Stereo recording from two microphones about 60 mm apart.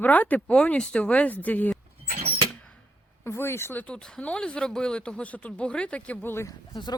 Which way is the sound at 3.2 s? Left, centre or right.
Left.